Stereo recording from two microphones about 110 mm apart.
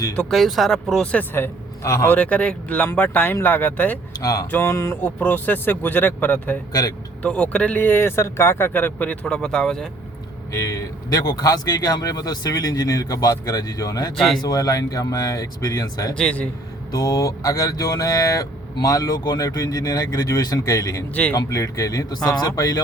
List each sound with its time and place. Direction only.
0.2 s speech: centre (ahead or behind)
1.1 s a man's voice: 20° left (ahead or behind)
2.0 s speech: 15° left (ahead or behind)
4.2 s speech: 30° left (ahead or behind)
4.5 s a sound: 25° left (ahead or behind)
5.0 s speech: 15° left (ahead or behind)
10.7 s speech: 35° left (ahead or behind)
14.2 s speech: centre (ahead or behind)
14.4 s speech: 35° left (ahead or behind)
16.1 s speech: 10° left (ahead or behind)
16.9 s speech: 35° left (ahead or behind)